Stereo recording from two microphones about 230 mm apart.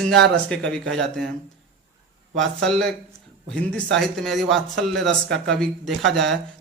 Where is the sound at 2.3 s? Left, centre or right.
Right.